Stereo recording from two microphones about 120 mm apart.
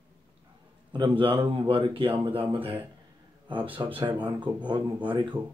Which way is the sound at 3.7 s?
45° right (ahead or behind).